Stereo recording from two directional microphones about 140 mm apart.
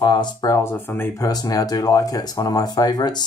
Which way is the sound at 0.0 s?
30° left (ahead or behind).